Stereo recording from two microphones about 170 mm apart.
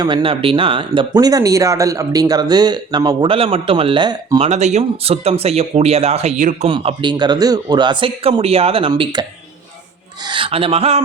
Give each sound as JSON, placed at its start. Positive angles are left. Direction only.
{"t": 0.0, "sound": "speech", "side_deg": -30}
{"t": 4.4, "sound": "speech", "side_deg": -40}
{"t": 6.7, "sound": "speech", "side_deg": -30}
{"t": 10.2, "sound": "speech", "side_deg": -30}